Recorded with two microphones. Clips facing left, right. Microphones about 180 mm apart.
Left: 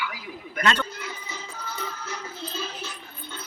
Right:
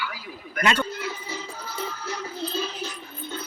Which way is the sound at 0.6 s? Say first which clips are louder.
Right 1 dB; 10° right (ahead or behind).